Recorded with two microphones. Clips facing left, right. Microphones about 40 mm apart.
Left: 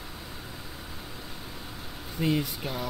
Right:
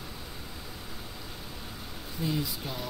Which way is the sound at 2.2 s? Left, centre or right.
Left.